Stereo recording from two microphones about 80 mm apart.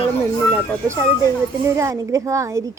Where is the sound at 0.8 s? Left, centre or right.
Right.